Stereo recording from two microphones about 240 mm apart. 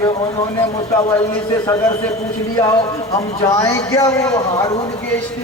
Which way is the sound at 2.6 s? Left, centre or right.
Centre.